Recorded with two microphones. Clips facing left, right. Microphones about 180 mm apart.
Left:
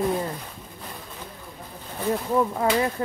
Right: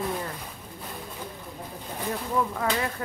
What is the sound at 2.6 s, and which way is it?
Speech, 25° left (ahead or behind).